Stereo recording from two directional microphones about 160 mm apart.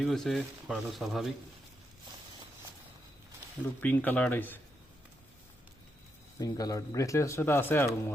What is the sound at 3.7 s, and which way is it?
Speech, 10° left (ahead or behind).